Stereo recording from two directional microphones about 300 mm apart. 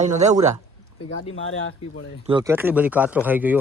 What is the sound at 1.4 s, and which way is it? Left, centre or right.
Speech, left.